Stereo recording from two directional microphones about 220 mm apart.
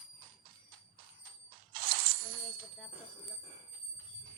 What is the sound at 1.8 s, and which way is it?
Coin, 40° right (ahead or behind).